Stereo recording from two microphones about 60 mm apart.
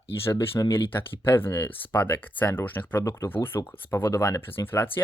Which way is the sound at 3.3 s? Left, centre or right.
Left.